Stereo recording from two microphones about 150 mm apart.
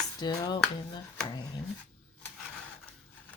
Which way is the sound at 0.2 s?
30° left (ahead or behind).